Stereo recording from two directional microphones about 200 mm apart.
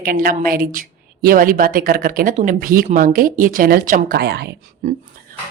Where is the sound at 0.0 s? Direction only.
45° right (ahead or behind).